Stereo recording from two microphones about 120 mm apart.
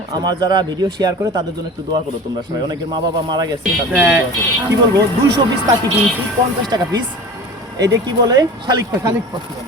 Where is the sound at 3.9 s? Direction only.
15° right (ahead or behind).